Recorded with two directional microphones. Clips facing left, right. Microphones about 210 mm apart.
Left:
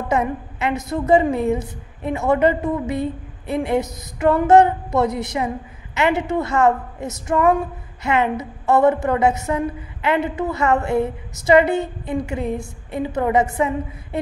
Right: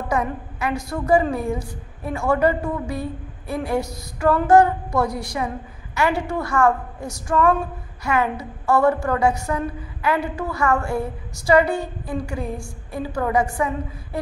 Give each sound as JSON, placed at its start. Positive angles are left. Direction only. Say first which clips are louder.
{"t": 0.1, "sound": "a woman's voice", "louder": "left 3 dB", "side_deg": 25}